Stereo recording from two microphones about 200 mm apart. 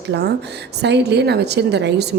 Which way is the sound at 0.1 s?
55° right (ahead or behind).